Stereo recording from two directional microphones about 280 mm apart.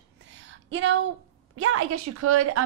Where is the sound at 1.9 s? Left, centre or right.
Right.